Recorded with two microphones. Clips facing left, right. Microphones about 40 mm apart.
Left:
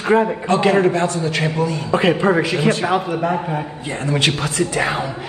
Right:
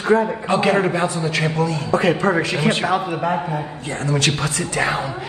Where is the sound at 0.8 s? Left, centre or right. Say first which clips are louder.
Left 3 dB; centre.